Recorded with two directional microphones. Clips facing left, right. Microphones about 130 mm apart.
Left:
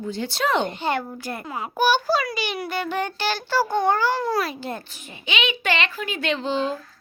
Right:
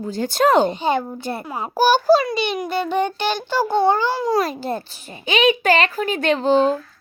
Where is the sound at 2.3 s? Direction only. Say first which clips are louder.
Right 5 dB; 20° right (ahead or behind).